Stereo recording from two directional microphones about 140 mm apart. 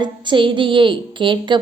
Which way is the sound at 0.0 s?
35° right (ahead or behind).